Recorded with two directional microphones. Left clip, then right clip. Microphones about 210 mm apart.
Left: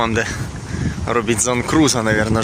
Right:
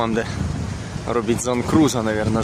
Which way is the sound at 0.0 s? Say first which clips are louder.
Left 3 dB; 5° right (ahead or behind).